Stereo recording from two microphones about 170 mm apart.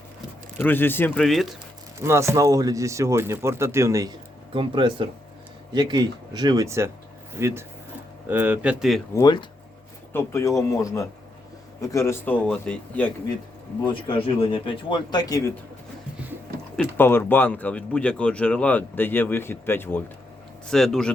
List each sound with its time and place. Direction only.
0.6 s speech: 10° left (ahead or behind)
2.0 s speech: 15° right (ahead or behind)
9.1 s speech: 25° left (ahead or behind); by 13.1 s 5° left (ahead or behind)
14.3 s speech: 30° left (ahead or behind)
16.7 s speech: 10° left (ahead or behind)
20.7 s speech: centre (ahead or behind)